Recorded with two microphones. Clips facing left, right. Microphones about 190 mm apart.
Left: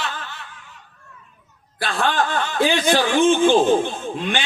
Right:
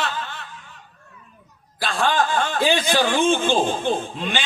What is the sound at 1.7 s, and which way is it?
A man's voice, 55° left (ahead or behind).